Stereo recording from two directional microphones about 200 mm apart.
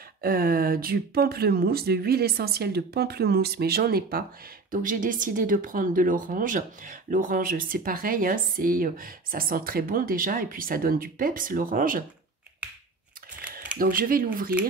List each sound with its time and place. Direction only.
0.2 s speech: 45° right (ahead or behind)
13.4 s mechanisms: 5° right (ahead or behind)
13.7 s speech: 45° right (ahead or behind)